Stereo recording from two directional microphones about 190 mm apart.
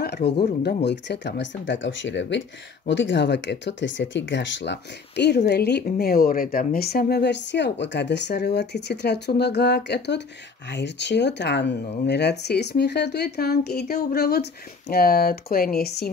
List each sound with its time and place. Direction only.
0.0 s speech: 60° left (ahead or behind)